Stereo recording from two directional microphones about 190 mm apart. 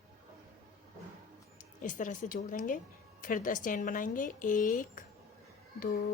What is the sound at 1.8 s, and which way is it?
A woman's voice, 45° left (ahead or behind).